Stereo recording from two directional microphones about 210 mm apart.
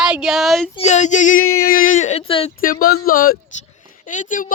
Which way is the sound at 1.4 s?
90° left.